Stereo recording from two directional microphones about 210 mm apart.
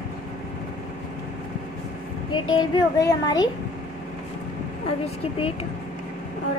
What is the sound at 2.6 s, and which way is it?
Speech, 20° left (ahead or behind).